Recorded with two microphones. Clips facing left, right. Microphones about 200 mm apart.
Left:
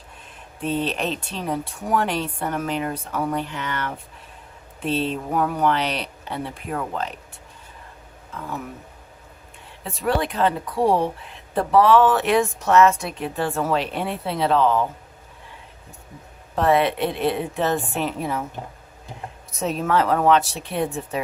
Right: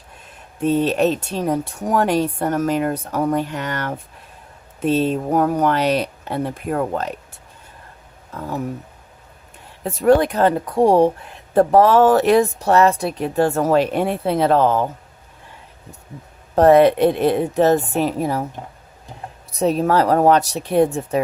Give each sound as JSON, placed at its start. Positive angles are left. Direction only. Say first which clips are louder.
{"t": 0.6, "sound": "speech", "louder": "right 8 dB", "side_deg": -45}
{"t": 8.3, "sound": "speech", "louder": "right 5 dB", "side_deg": -40}
{"t": 9.8, "sound": "speech", "louder": "right 9 dB", "side_deg": -45}
{"t": 16.6, "sound": "a woman's voice", "louder": "right 8 dB", "side_deg": -45}
{"t": 19.5, "sound": "a woman's voice", "louder": "right 6 dB", "side_deg": -35}